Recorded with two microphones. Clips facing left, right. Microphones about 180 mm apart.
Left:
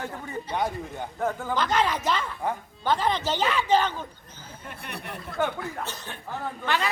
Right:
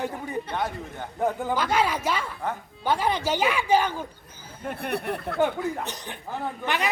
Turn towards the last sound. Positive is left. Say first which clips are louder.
# right 1 dB
turn(degrees=-15)  # may be behind; listen again after turning